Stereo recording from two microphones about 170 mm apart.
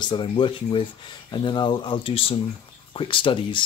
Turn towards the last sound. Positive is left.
turn(degrees=30)  # may be behind; listen again after turning